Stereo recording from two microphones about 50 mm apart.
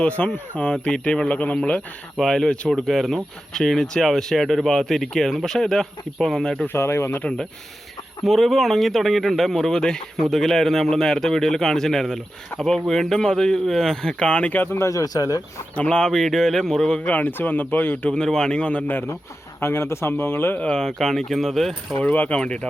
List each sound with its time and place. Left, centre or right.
0.2 s a man's voice: left
2.1 s a man's voice: centre
6.7 s speech: left
8.2 s a man's voice: centre; by 14.5 s left
14.5 s speech: left
14.8 s speech: left
15.7 s a man's voice: left
17.0 s speech: left
18.1 s a man's voice: centre
19.5 s speech: left
20.7 s speech: centre
22.1 s speech: left
22.4 s a man's voice: left